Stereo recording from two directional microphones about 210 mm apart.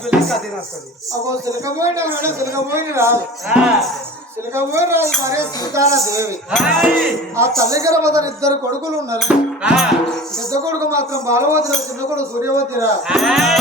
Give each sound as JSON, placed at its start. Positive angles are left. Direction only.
{"t": 0.1, "sound": "speech", "side_deg": -5}
{"t": 1.5, "sound": "speech", "side_deg": -15}
{"t": 6.5, "sound": "speech", "side_deg": 0}
{"t": 7.3, "sound": "speech", "side_deg": -15}
{"t": 9.2, "sound": "speech", "side_deg": -5}
{"t": 10.5, "sound": "speech", "side_deg": -15}
{"t": 13.1, "sound": "speech", "side_deg": 0}